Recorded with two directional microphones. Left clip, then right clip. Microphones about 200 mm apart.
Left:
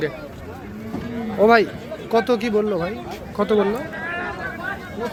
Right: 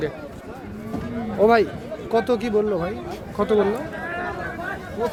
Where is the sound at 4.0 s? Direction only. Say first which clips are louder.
Left 1 dB; 35° right (ahead or behind).